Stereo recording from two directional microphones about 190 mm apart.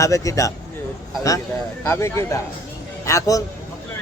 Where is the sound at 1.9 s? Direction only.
15° left (ahead or behind).